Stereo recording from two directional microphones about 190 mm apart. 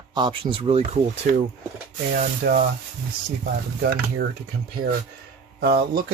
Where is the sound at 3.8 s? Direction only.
60° right (ahead or behind).